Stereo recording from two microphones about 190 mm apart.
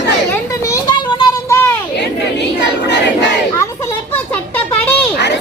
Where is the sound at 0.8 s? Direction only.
25° left (ahead or behind).